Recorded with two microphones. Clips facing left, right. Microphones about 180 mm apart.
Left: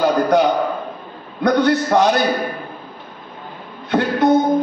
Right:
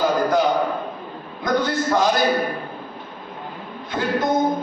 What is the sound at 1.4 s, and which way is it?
Speech, 65° left (ahead or behind).